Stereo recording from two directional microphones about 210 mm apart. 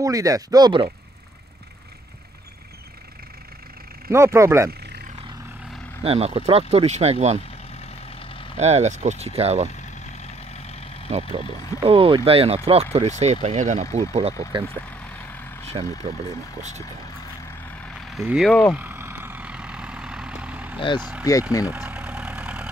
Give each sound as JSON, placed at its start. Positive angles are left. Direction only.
{"t": 0.0, "sound": "speech", "side_deg": -15}
{"t": 4.1, "sound": "speech", "side_deg": -15}
{"t": 6.0, "sound": "speech", "side_deg": -30}
{"t": 7.7, "sound": "vehicle", "side_deg": 30}
{"t": 8.5, "sound": "speech", "side_deg": -30}
{"t": 9.8, "sound": "vehicle", "side_deg": 30}
{"t": 11.1, "sound": "speech", "side_deg": -30}
{"t": 17.6, "sound": "vehicle", "side_deg": 0}
{"t": 18.8, "sound": "vehicle", "side_deg": -10}
{"t": 21.2, "sound": "speech", "side_deg": 15}
{"t": 21.6, "sound": "vehicle", "side_deg": -10}